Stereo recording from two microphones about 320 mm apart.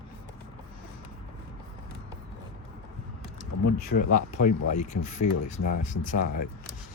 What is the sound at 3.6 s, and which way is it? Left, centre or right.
Speech, left.